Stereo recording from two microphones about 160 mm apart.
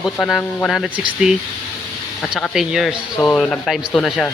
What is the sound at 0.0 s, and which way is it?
Speech, centre (ahead or behind).